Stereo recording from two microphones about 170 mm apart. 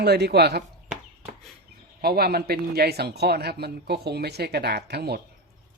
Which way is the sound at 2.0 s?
65° right (ahead or behind).